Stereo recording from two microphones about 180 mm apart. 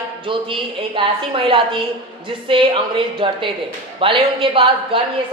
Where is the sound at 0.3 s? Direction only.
30° right (ahead or behind).